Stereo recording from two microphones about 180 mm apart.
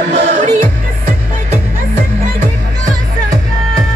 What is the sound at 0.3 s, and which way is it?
Music, 45° right (ahead or behind).